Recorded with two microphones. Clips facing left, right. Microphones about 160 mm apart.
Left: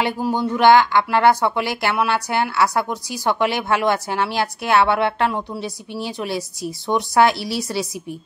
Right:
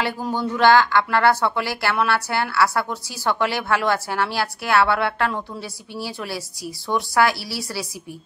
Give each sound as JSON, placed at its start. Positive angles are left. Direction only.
{"t": 0.2, "sound": "speech", "side_deg": 15}